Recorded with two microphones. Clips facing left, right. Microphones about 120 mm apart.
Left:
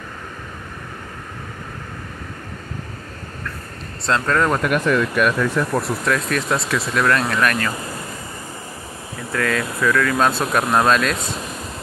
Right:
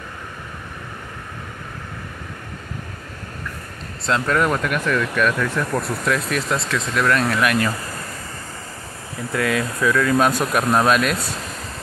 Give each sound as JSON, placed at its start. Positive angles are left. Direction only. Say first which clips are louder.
{"t": 4.0, "sound": "speech", "louder": "left 1 dB", "side_deg": -5}
{"t": 4.5, "sound": "speech", "louder": "left 3 dB", "side_deg": 20}
{"t": 5.7, "sound": "speech", "louder": "left 1 dB", "side_deg": 0}
{"t": 7.3, "sound": "speech", "louder": "right 1 dB", "side_deg": -10}
{"t": 9.3, "sound": "speech", "louder": "even", "side_deg": -10}
{"t": 10.6, "sound": "speech", "louder": "even", "side_deg": 15}
{"t": 10.9, "sound": "speech", "louder": "even", "side_deg": -10}
{"t": 11.1, "sound": "speech", "louder": "left 1 dB", "side_deg": 15}